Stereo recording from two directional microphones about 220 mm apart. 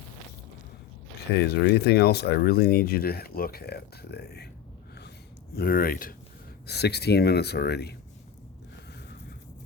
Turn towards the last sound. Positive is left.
turn(degrees=50)  # may be behind; listen again after turning